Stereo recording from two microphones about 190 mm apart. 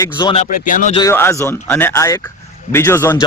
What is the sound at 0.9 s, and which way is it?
Speech, 15° left (ahead or behind).